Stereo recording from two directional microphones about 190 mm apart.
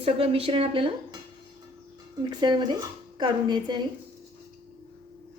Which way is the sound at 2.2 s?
25° right (ahead or behind).